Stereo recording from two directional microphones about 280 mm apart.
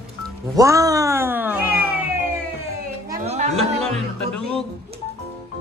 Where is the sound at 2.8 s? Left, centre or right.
Right.